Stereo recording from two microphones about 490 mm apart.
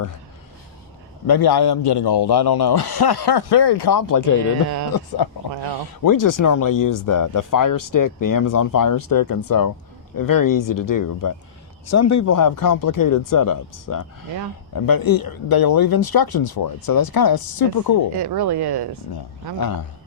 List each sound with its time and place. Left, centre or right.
1.3 s speech: left
4.9 s speech: left
6.0 s speech: left
18.2 s speech: right
19.1 s speech: left